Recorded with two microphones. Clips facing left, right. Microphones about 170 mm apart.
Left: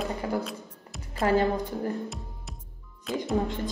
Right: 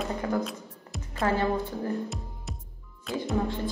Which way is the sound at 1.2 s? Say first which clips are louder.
Left 3 dB; 30° left (ahead or behind).